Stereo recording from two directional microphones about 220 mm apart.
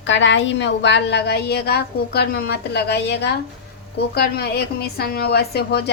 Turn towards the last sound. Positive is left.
turn(degrees=45)  # may be behind; listen again after turning